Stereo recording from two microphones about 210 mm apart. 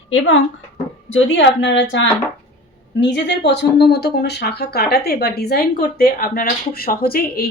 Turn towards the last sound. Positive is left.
turn(degrees=45)  # may be behind; listen again after turning